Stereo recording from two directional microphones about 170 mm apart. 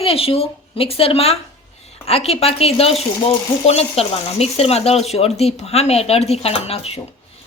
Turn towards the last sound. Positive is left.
turn(degrees=35)  # may be behind; listen again after turning